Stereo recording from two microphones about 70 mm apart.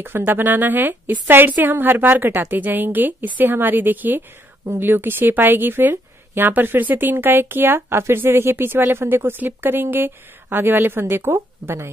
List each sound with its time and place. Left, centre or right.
0.0 s a woman's voice: right